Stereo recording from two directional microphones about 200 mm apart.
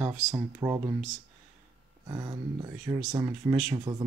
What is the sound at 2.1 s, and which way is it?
Speech, 20° right (ahead or behind).